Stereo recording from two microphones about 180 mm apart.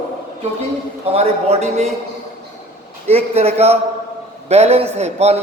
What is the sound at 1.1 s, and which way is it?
Speech, 35° right (ahead or behind).